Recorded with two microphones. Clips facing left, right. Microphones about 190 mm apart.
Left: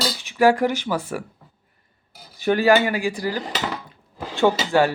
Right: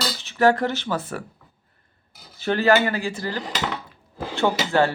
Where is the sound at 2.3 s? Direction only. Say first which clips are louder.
Left 2 dB; 15° left (ahead or behind).